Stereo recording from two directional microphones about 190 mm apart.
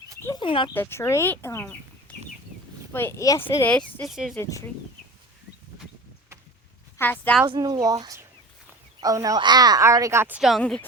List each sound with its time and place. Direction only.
0.2 s a sound: 15° left (ahead or behind)
0.4 s speech: 25° left (ahead or behind)
0.7 s speech: 10° left (ahead or behind)
4.4 s speech: 15° left (ahead or behind)
7.0 s speech: 10° left (ahead or behind)
7.4 s speech: 20° right (ahead or behind); by 10.8 s 5° left (ahead or behind)